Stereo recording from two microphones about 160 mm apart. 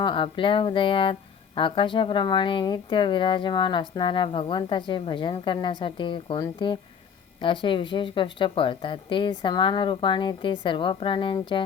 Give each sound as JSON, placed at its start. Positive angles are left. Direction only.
{"t": 0.0, "sound": "speech", "side_deg": 30}